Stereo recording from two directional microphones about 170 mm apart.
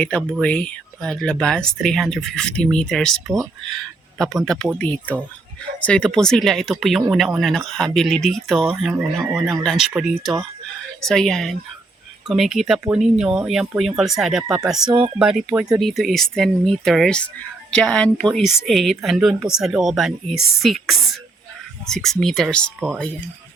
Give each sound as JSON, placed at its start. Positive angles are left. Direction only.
{"t": 0.0, "sound": "speech", "side_deg": 5}
{"t": 5.8, "sound": "speech", "side_deg": 5}
{"t": 14.8, "sound": "speech", "side_deg": -25}
{"t": 15.2, "sound": "speech", "side_deg": -5}